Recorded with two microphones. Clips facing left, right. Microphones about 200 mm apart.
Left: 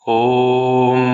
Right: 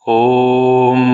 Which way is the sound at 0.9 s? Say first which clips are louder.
Right 3 dB; 30° right (ahead or behind).